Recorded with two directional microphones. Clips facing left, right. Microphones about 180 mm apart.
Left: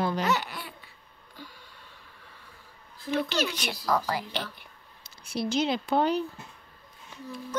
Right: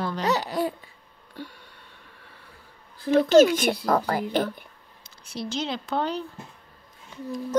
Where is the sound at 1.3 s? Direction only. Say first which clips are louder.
Right 7 dB; 65° right (ahead or behind).